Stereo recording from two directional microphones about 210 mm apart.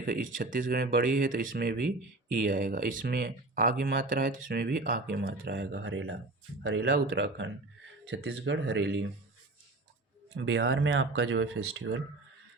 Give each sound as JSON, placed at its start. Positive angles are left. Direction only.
{"t": 0.0, "sound": "speech", "side_deg": -40}
{"t": 5.8, "sound": "speech", "side_deg": -70}
{"t": 6.6, "sound": "speech", "side_deg": -50}
{"t": 10.3, "sound": "speech", "side_deg": -60}